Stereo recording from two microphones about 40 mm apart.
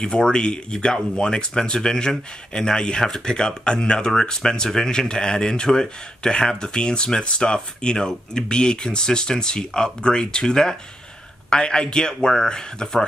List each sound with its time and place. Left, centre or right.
0.0 s speech: left